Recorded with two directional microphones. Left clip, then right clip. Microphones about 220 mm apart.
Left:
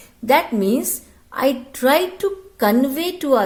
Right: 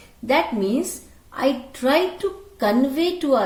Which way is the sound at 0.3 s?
50° left (ahead or behind).